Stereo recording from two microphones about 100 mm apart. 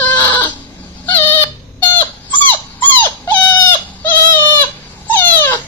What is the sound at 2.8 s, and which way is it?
Dog, 15° left (ahead or behind).